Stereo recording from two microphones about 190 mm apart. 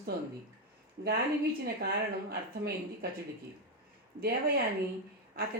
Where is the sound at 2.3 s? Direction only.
55° right (ahead or behind).